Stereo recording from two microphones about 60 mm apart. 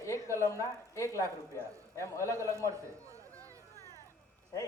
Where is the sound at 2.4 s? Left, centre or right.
Right.